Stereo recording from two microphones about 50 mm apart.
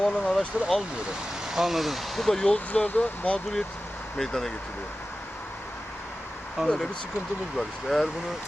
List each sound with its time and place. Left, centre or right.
0.0 s speech: centre
1.5 s speech: centre
2.7 s speech: left
4.2 s speech: centre
6.6 s speech: centre
7.5 s speech: centre